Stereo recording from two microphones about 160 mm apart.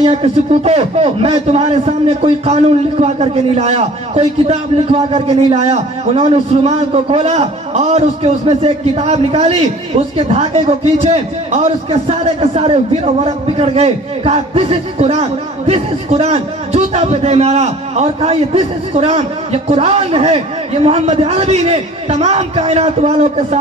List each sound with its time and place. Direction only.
0.0 s a man's voice: 40° right (ahead or behind)